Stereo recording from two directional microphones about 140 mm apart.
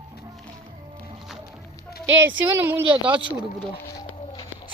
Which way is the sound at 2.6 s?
15° right (ahead or behind).